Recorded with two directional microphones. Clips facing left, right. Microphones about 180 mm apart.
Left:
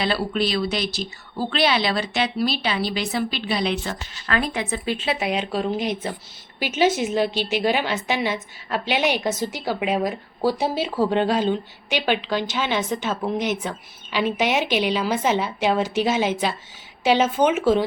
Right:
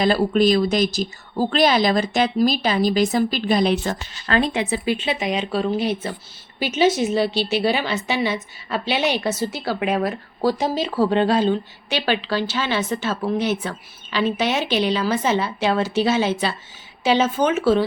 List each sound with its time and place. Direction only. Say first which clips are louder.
0.0 s a woman's voice: right 6 dB; 45° right (ahead or behind)
4.3 s speech: right 4 dB; 25° right (ahead or behind)
4.7 s speech: right 3 dB; centre (ahead or behind); by 17.8 s 15° left (ahead or behind)